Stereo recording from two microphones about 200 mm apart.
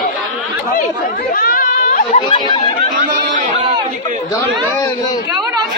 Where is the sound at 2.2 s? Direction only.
20° left (ahead or behind).